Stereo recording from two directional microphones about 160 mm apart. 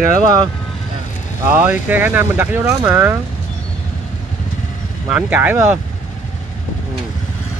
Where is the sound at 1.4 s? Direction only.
10° right (ahead or behind).